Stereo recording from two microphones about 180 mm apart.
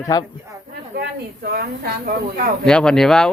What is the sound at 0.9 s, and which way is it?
Snake, 65° right (ahead or behind).